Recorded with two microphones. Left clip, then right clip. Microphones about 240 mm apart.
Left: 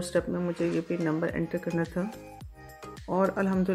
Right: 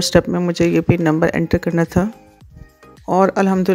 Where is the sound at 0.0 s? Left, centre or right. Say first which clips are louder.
Right 13 dB; right.